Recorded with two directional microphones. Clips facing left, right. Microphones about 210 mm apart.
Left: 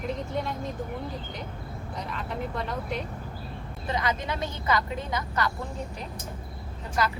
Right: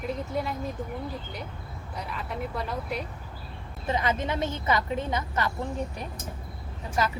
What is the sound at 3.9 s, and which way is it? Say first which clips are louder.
A woman's voice: right 2 dB; 25° right (ahead or behind).